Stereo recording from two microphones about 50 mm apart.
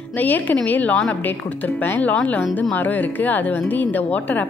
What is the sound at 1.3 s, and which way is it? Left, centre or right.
A woman's voice, left.